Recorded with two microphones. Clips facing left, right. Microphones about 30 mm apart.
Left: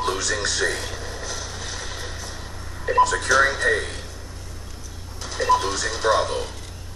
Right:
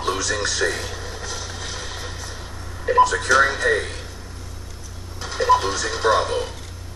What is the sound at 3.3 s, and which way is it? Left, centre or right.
Speech, centre.